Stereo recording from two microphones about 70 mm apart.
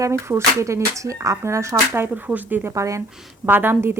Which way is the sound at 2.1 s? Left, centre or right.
Right.